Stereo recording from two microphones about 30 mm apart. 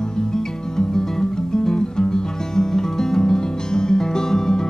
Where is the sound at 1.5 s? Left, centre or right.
Left.